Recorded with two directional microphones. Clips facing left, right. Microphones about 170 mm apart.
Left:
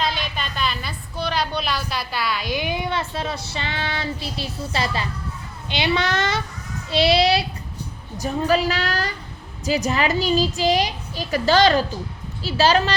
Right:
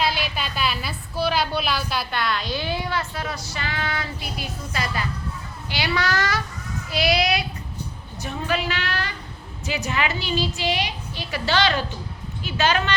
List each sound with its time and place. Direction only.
0.0 s a woman's voice: 5° right (ahead or behind); by 12.9 s 35° left (ahead or behind)